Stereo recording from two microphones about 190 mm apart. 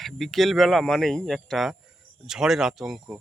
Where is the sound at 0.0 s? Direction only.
Centre (ahead or behind).